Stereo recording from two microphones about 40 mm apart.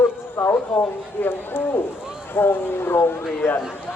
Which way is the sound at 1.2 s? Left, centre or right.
Left.